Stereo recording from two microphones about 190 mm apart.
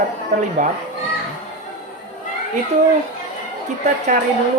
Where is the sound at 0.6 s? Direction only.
40° right (ahead or behind).